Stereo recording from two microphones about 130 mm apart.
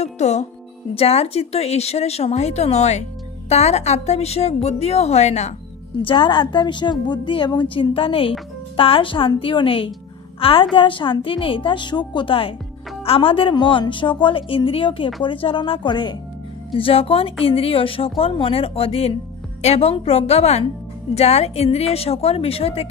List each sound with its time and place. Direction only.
0.0 s speech: 60° left (ahead or behind)
6.0 s a woman's voice: 40° left (ahead or behind)